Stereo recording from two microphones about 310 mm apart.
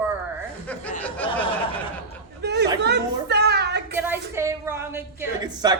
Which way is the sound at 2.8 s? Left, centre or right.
Right.